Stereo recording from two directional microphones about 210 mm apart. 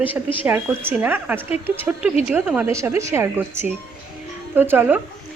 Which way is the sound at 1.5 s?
30° left (ahead or behind).